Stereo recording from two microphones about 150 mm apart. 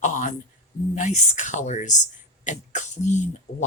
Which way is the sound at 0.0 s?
55° left (ahead or behind).